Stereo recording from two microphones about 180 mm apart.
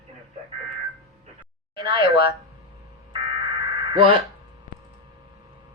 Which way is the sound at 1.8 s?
30° right (ahead or behind).